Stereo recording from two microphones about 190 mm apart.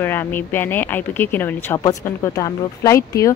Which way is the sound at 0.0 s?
10° left (ahead or behind).